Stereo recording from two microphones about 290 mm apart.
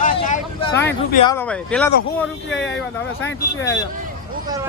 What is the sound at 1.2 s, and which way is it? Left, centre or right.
Speech, centre.